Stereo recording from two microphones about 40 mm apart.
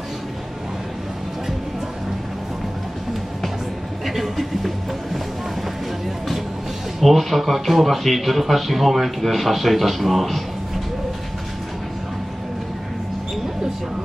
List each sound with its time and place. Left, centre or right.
4.0 s music: centre
7.0 s speech: centre